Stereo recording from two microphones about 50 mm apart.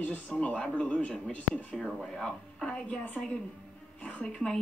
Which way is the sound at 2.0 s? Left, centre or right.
Centre.